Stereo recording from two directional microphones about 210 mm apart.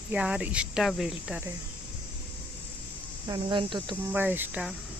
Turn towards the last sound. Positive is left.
turn(degrees=-5)  # may be behind; listen again after turning